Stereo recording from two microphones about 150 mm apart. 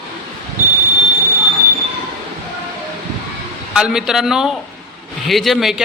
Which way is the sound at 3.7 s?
5° right (ahead or behind).